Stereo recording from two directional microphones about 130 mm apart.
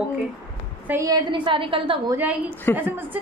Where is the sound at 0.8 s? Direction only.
25° right (ahead or behind); by 2.0 s 40° right (ahead or behind).